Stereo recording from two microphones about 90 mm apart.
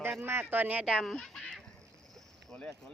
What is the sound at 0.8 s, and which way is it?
Speech, centre (ahead or behind).